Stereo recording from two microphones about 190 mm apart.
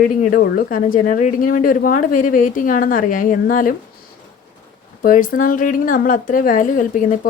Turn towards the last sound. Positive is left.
turn(degrees=45)  # may be behind; listen again after turning